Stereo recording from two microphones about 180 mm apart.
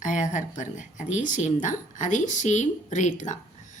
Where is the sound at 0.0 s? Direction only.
45° left (ahead or behind).